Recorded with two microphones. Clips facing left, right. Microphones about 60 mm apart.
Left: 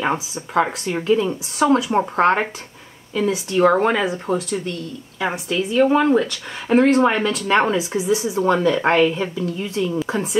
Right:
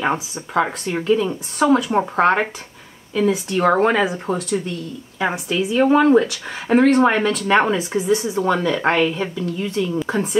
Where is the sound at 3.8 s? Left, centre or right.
Centre.